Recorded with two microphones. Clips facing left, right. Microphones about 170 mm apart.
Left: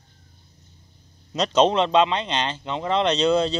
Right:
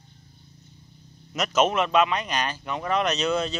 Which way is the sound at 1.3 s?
30° left (ahead or behind).